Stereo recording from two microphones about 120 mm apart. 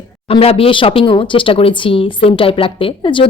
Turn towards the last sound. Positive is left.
turn(degrees=45)  # may be behind; listen again after turning